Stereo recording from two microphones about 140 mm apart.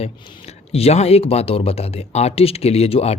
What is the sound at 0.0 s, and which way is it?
Speech, 45° left (ahead or behind).